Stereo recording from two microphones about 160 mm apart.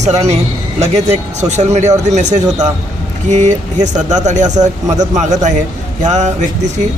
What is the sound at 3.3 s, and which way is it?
Speech, 50° right (ahead or behind).